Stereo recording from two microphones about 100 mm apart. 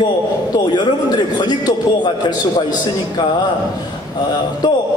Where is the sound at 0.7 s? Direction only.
45° left (ahead or behind).